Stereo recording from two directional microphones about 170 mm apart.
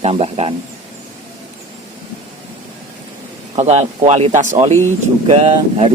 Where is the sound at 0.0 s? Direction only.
35° right (ahead or behind).